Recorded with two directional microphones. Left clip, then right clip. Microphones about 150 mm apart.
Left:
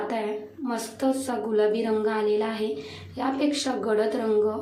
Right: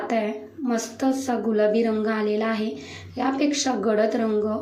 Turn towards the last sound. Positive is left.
turn(degrees=-15)  # may be behind; listen again after turning